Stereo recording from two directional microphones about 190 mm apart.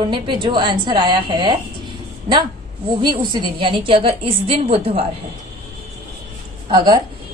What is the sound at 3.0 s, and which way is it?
A woman's voice, 25° right (ahead or behind).